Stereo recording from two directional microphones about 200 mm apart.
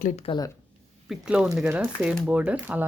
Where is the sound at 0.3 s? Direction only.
20° left (ahead or behind).